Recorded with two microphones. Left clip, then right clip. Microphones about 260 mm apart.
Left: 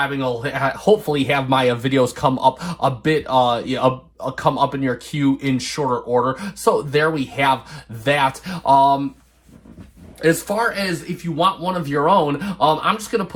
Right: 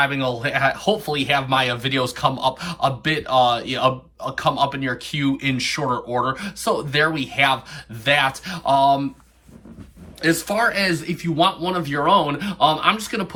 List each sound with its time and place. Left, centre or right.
0.0 s speech: centre
10.2 s speech: left